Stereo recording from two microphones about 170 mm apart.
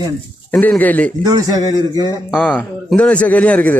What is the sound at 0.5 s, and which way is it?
Speech, 5° left (ahead or behind).